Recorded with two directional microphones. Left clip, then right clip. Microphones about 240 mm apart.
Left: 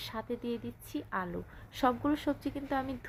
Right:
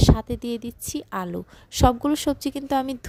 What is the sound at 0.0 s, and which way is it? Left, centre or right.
A woman's voice, right.